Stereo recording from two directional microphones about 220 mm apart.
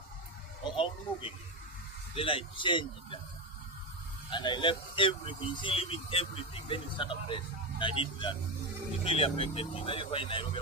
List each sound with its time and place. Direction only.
0.7 s a man's voice: 25° left (ahead or behind)
4.3 s a man's voice: 20° left (ahead or behind)